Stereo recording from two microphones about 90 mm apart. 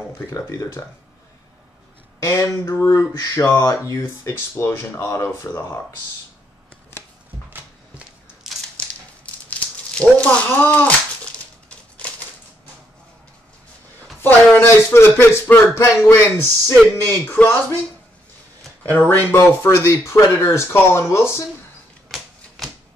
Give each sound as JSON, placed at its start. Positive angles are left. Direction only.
{"t": 0.3, "sound": "speech", "side_deg": 40}
{"t": 2.2, "sound": "speech", "side_deg": 35}
{"t": 8.7, "sound": "a sound", "side_deg": 15}
{"t": 12.0, "sound": "typewriter", "side_deg": 15}
{"t": 14.2, "sound": "speech", "side_deg": 25}
{"t": 18.9, "sound": "speech", "side_deg": 25}